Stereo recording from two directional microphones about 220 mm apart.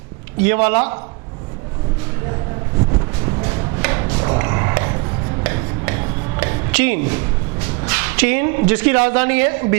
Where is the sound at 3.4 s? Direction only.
25° right (ahead or behind).